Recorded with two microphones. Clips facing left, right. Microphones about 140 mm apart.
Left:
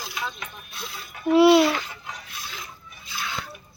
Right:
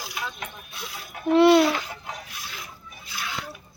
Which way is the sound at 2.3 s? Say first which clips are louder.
Left 1 dB; 10° right (ahead or behind).